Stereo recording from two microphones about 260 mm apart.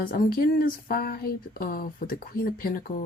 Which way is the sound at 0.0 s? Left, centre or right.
Left.